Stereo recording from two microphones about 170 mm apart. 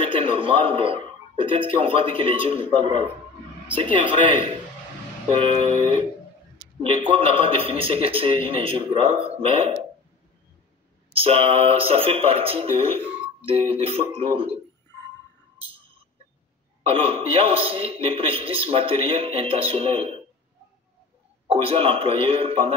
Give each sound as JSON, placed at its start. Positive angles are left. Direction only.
{"t": 0.1, "sound": "a man's voice", "side_deg": -30}
{"t": 3.7, "sound": "a sound", "side_deg": -30}
{"t": 5.4, "sound": "a sound", "side_deg": -30}
{"t": 6.8, "sound": "a man's voice", "side_deg": -30}
{"t": 11.1, "sound": "a man's voice", "side_deg": -35}
{"t": 16.8, "sound": "a man's voice", "side_deg": -35}
{"t": 21.5, "sound": "a man's voice", "side_deg": -35}